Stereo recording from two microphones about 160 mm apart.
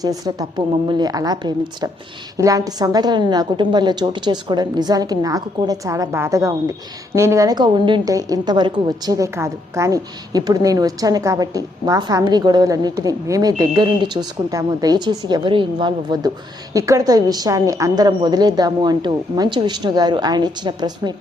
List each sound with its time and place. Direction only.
0.0 s a woman's voice: 25° right (ahead or behind)